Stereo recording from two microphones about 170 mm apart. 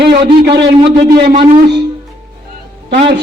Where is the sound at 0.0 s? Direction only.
70° right (ahead or behind).